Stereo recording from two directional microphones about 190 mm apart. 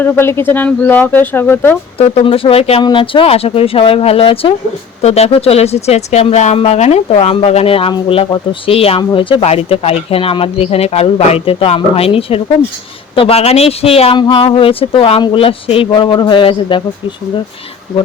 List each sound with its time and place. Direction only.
0.0 s speech: 10° left (ahead or behind)
2.0 s speech: 30° left (ahead or behind)